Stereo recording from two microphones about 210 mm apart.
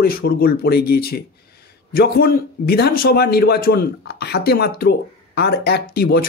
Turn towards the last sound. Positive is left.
turn(degrees=50)  # may be behind; listen again after turning